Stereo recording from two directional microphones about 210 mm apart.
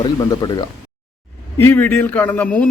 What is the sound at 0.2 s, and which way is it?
Speech, 20° left (ahead or behind).